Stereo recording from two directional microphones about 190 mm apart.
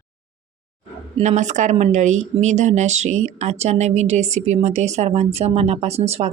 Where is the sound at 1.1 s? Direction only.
40° right (ahead or behind).